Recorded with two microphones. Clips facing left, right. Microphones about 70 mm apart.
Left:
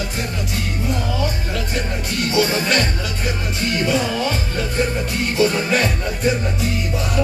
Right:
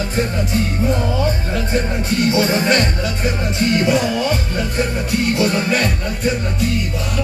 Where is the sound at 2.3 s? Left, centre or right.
Right.